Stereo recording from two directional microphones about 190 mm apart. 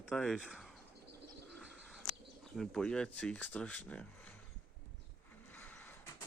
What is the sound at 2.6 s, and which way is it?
Speech, 5° left (ahead or behind).